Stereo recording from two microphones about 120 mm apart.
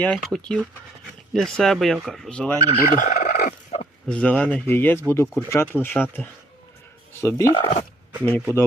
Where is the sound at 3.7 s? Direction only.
65° left (ahead or behind).